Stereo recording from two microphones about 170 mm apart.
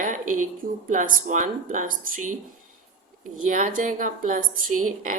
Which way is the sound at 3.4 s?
50° right (ahead or behind).